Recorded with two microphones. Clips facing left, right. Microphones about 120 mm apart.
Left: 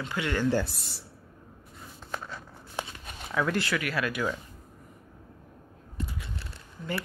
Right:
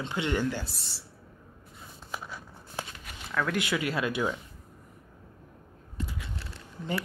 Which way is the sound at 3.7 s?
25° right (ahead or behind).